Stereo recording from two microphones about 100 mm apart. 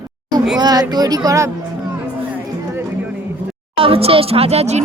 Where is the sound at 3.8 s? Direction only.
70° right (ahead or behind); by 4.8 s 90° right.